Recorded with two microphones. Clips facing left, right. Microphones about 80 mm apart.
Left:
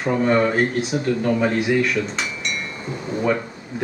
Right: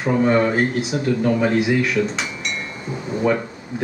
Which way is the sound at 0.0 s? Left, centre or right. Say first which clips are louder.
Right 1 dB; centre.